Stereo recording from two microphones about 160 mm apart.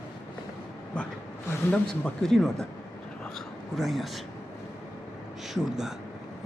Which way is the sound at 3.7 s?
Centre (ahead or behind).